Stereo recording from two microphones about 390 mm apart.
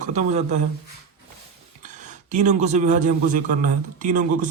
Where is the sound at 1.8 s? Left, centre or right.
Centre.